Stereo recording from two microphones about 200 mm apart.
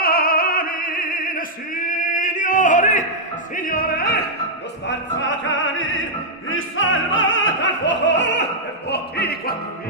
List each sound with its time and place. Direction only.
0.0 s opera: 45° left (ahead or behind)
4.8 s music: 70° left (ahead or behind)
8.9 s opera: 55° left (ahead or behind)